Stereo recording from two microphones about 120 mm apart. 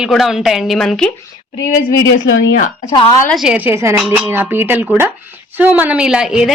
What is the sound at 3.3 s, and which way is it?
Speech, 10° right (ahead or behind).